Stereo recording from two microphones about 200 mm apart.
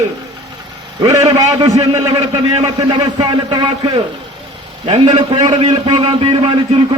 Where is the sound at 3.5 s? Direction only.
20° right (ahead or behind).